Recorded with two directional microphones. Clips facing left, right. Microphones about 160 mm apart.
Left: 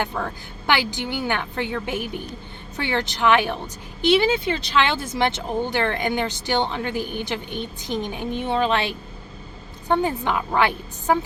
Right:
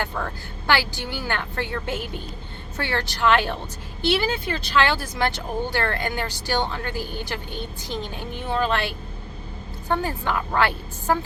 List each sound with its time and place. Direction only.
0.2 s a woman's voice: 5° left (ahead or behind)
0.7 s a woman's voice: 15° left (ahead or behind)